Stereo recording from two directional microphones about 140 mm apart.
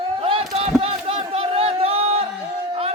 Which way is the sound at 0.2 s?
40° right (ahead or behind).